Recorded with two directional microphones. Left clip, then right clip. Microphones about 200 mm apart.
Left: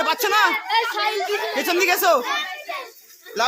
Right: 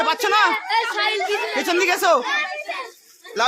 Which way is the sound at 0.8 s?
30° right (ahead or behind).